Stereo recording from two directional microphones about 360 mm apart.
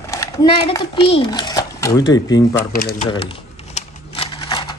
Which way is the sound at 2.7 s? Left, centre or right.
Left.